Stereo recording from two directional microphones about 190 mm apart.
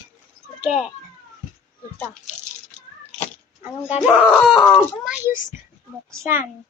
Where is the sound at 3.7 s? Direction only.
10° right (ahead or behind).